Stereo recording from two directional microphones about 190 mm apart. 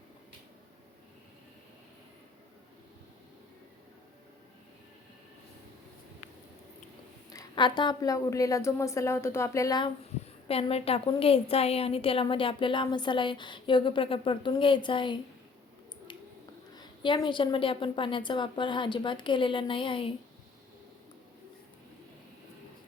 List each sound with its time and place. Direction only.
7.3 s a woman's voice: 20° left (ahead or behind)
10.5 s a woman's voice: 30° left (ahead or behind)
16.7 s a woman's voice: 25° left (ahead or behind)